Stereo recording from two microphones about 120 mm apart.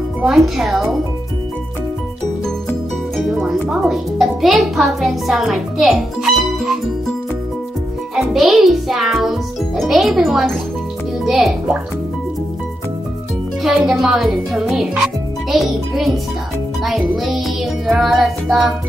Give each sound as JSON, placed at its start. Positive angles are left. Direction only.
{"t": 0.2, "sound": "speech", "side_deg": -5}
{"t": 3.3, "sound": "a child's voice", "side_deg": -5}
{"t": 8.2, "sound": "a child's voice", "side_deg": 0}
{"t": 13.6, "sound": "speech", "side_deg": 0}